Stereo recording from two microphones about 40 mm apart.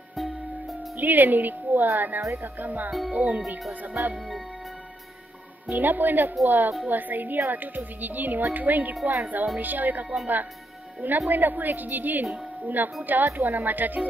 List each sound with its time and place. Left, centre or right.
0.1 s music: centre
0.9 s a woman's voice: right
5.7 s a woman's voice: right
11.2 s a woman's voice: right